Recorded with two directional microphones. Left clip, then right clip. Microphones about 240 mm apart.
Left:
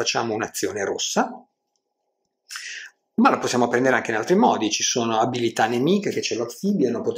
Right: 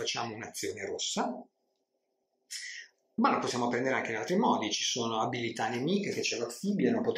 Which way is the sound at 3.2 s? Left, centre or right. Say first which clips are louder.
Left 9 dB; left.